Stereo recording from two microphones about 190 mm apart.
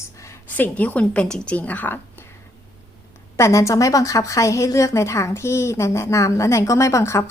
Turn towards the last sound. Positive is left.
turn(degrees=15)  # may be behind; listen again after turning